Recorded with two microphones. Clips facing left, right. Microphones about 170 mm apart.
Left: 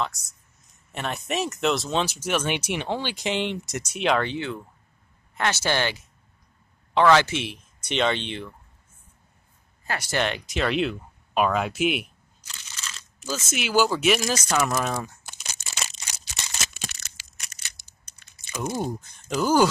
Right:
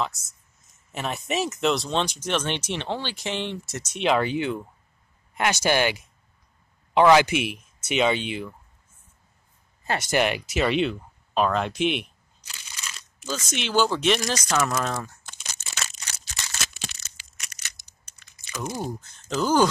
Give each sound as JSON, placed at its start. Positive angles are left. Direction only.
{"t": 0.0, "sound": "speech", "side_deg": 0}
{"t": 4.0, "sound": "speech", "side_deg": -5}
{"t": 9.8, "sound": "speech", "side_deg": -20}
{"t": 10.2, "sound": "speech", "side_deg": -10}
{"t": 12.4, "sound": "crunch", "side_deg": -10}
{"t": 13.2, "sound": "speech", "side_deg": 5}
{"t": 15.9, "sound": "a sound", "side_deg": 20}
{"t": 16.7, "sound": "a sound", "side_deg": 65}
{"t": 18.3, "sound": "speech", "side_deg": 25}